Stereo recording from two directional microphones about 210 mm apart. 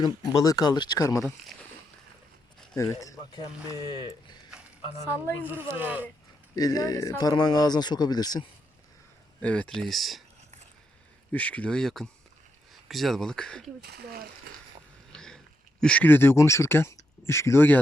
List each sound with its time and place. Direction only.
0.3 s speech: 15° left (ahead or behind)
2.7 s speech: 15° left (ahead or behind)
5.4 s speech: 10° right (ahead or behind)
6.6 s speech: 20° left (ahead or behind)
9.4 s speech: 5° left (ahead or behind)
11.3 s speech: 5° left (ahead or behind)
13.8 s speech: 50° right (ahead or behind)
15.1 s a sound: 5° left (ahead or behind)
15.8 s speech: 5° left (ahead or behind)